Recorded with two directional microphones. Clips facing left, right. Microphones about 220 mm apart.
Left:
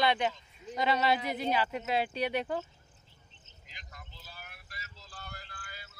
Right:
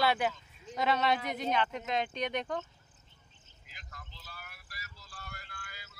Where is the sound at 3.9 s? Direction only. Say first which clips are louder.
Right 1 dB; 15° left (ahead or behind).